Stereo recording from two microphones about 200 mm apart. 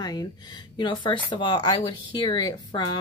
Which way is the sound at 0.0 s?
20° left (ahead or behind).